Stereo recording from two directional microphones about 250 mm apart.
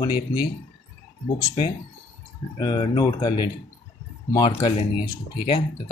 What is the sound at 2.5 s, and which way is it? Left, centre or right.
Speech, centre.